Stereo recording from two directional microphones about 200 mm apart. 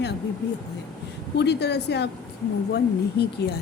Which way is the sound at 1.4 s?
55° left (ahead or behind).